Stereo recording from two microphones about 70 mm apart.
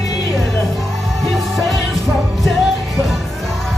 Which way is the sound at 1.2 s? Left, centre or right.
Centre.